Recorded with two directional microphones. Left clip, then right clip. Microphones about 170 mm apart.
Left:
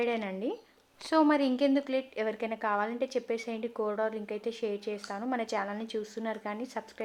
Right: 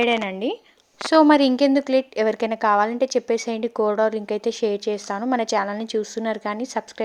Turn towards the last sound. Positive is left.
turn(degrees=-45)  # may be behind; listen again after turning